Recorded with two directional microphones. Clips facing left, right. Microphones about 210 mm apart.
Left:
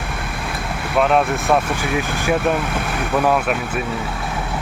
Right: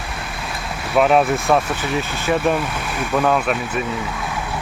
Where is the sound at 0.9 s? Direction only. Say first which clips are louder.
Right 2 dB; 5° right (ahead or behind).